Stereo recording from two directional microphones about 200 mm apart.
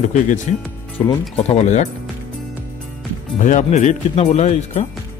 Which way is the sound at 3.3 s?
40° left (ahead or behind).